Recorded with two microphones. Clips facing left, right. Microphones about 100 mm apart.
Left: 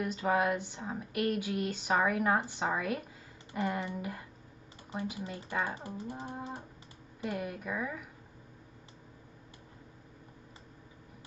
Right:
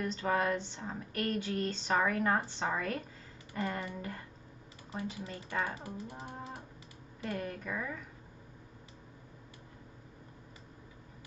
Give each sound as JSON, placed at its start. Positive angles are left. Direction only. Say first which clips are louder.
{"t": 0.0, "sound": "speech", "louder": "left 2 dB", "side_deg": 10}
{"t": 5.8, "sound": "a sound", "louder": "left 3 dB", "side_deg": 30}
{"t": 7.2, "sound": "speech", "louder": "left 2 dB", "side_deg": 10}